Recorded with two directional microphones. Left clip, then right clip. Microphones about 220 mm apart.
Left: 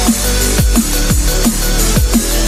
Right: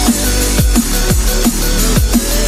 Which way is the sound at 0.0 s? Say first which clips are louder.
Even; centre (ahead or behind).